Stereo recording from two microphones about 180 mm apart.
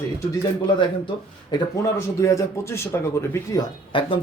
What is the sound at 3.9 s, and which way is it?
Speech, 30° left (ahead or behind).